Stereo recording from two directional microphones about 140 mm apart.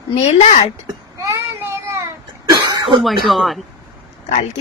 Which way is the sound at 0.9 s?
25° right (ahead or behind).